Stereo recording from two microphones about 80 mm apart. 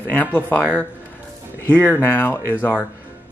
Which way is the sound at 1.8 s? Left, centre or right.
Left.